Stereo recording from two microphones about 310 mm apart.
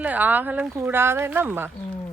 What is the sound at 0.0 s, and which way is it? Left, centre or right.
Speech, centre.